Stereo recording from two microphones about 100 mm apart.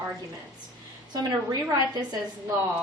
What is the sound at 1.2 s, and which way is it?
Speech, 40° right (ahead or behind).